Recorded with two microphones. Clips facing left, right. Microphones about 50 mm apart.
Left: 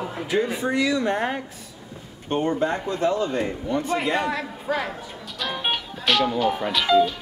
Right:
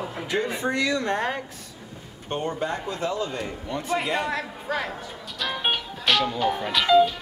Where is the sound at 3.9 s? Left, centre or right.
Centre.